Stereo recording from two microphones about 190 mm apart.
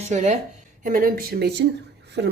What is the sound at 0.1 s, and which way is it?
A woman's voice, 40° right (ahead or behind).